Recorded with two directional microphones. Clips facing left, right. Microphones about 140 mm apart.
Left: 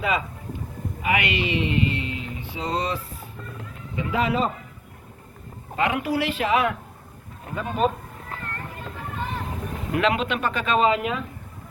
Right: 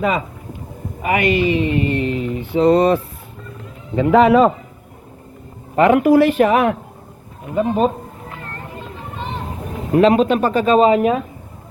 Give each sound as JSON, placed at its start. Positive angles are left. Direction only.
{"t": 1.0, "sound": "mantra", "side_deg": -45}
{"t": 3.9, "sound": "speech", "side_deg": -65}
{"t": 5.7, "sound": "mantra", "side_deg": -50}
{"t": 7.5, "sound": "a man's voice", "side_deg": -30}
{"t": 9.1, "sound": "a sound", "side_deg": -20}
{"t": 9.9, "sound": "speech", "side_deg": -35}